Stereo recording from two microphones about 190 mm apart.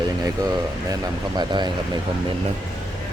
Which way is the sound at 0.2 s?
20° right (ahead or behind).